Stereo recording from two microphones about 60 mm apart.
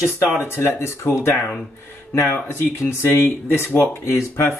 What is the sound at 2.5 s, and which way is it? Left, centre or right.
Speech, left.